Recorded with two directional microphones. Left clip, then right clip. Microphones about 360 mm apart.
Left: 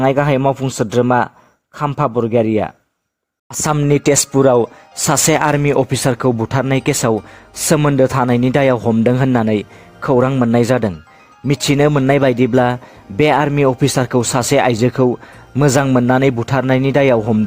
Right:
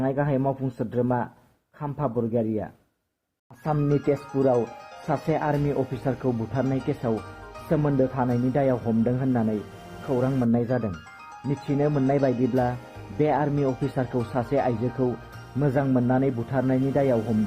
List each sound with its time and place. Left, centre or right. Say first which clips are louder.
0.0 s speech: left 12 dB; left